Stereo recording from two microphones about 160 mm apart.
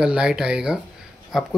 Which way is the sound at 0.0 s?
5° right (ahead or behind).